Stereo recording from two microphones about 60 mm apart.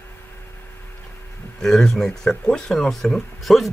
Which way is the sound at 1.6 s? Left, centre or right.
Centre.